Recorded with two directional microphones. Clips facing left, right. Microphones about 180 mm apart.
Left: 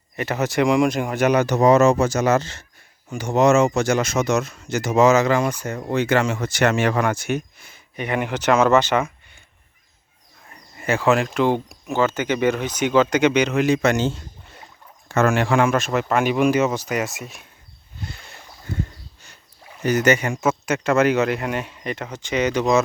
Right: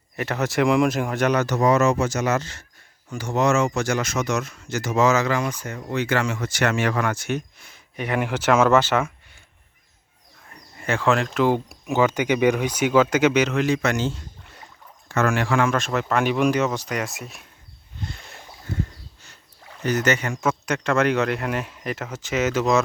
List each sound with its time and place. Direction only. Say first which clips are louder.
0.2 s speech: left 2 dB; centre (ahead or behind); by 5.5 s 20° left (ahead or behind)
5.6 s speech: left 4 dB; 35° left (ahead or behind)
6.1 s speech: left 4 dB; 20° left (ahead or behind); by 9.4 s 5° right (ahead or behind)
10.8 s speech: left 3 dB; 5° left (ahead or behind)
11.4 s speech: even; 5° right (ahead or behind)
13.6 s speech: left 3 dB; 20° left (ahead or behind)
15.1 s speech: left 3 dB; 25° left (ahead or behind)
15.7 s speech: left 2 dB; 5° left (ahead or behind)
19.7 s speech: left 4 dB; 10° left (ahead or behind)